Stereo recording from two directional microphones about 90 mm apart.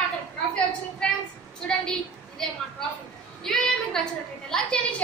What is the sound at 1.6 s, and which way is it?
A woman's voice, 5° left (ahead or behind).